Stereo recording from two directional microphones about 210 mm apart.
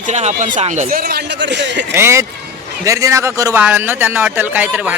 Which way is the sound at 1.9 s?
10° right (ahead or behind).